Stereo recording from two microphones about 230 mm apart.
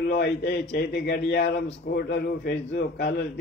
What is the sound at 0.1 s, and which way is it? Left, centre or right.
A man's voice, left.